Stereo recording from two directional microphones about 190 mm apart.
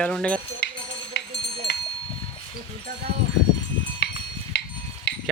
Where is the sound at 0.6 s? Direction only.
65° left (ahead or behind).